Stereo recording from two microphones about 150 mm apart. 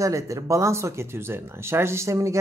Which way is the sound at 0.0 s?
20° right (ahead or behind).